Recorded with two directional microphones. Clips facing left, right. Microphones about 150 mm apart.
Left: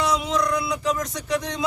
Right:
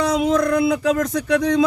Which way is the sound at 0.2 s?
55° right (ahead or behind).